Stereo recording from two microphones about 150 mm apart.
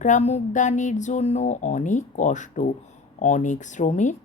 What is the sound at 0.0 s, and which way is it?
Speech, 50° left (ahead or behind).